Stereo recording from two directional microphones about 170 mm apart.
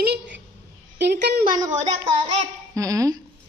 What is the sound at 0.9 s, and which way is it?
Speech, 80° right.